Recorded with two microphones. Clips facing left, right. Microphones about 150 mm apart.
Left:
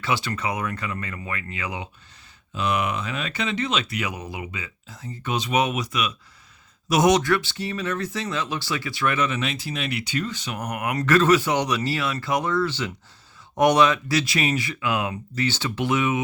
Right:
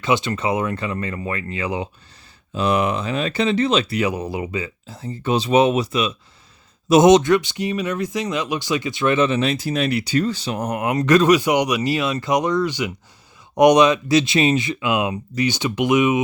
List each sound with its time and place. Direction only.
0.0 s speech: 20° right (ahead or behind)